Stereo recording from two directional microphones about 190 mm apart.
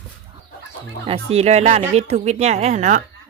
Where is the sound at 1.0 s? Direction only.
30° right (ahead or behind).